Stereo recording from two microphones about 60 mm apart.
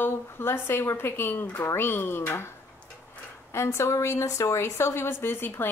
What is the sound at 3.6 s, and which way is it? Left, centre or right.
A woman's voice, left.